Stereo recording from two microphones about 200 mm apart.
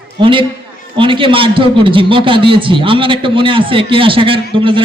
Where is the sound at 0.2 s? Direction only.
25° right (ahead or behind).